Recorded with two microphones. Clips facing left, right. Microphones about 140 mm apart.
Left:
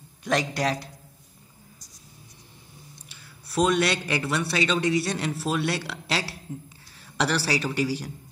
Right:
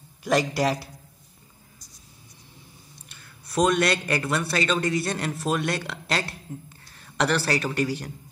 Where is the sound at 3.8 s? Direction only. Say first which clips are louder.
Right 2 dB; 5° left (ahead or behind).